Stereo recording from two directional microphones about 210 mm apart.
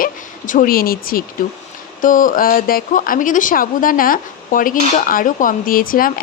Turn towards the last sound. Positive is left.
turn(degrees=40)  # may be behind; listen again after turning